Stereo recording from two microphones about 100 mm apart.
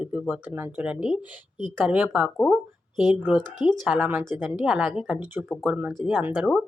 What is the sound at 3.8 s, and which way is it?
Speech, 10° right (ahead or behind).